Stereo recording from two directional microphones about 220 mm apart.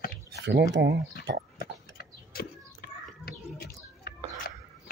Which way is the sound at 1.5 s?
45° left (ahead or behind).